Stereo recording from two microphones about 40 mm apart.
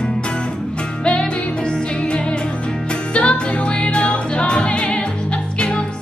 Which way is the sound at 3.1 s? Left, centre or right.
Left.